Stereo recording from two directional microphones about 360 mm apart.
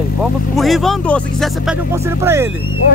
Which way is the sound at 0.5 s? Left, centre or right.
Centre.